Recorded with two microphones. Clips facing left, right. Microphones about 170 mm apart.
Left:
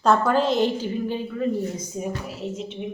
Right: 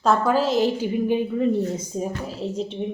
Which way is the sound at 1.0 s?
20° right (ahead or behind).